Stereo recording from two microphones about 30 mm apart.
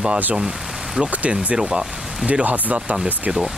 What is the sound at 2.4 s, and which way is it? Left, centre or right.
Speech, right.